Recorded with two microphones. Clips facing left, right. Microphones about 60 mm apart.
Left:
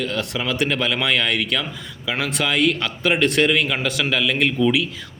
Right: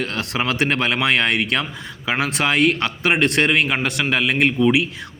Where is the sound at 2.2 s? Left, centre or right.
Right.